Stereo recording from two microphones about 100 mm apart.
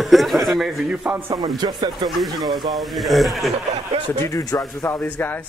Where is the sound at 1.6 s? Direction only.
45° right (ahead or behind).